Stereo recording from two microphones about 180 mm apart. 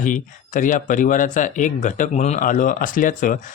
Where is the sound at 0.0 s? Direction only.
45° left (ahead or behind).